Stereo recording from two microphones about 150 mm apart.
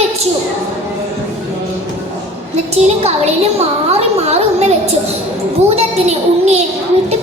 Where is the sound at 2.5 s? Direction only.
45° right (ahead or behind).